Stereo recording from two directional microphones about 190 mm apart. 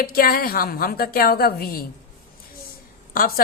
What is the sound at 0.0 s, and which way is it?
A woman's voice, 50° left (ahead or behind).